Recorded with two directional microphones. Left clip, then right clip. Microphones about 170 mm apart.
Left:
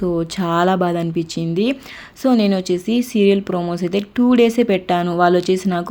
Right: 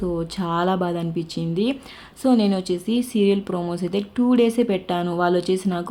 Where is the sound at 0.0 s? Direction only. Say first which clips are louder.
Left 5 dB; 20° left (ahead or behind).